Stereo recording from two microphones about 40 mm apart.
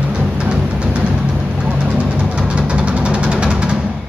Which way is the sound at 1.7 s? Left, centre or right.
Right.